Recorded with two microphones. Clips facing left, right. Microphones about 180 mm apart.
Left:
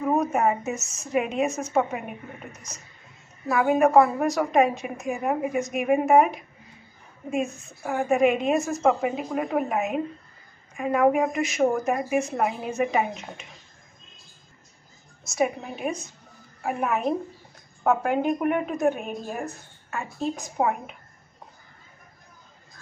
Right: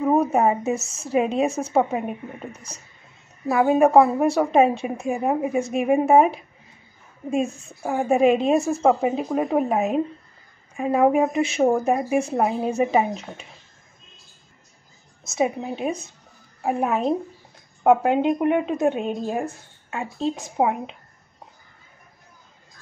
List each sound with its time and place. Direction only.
0.1 s a woman's voice: 30° right (ahead or behind)
15.3 s speech: 25° right (ahead or behind)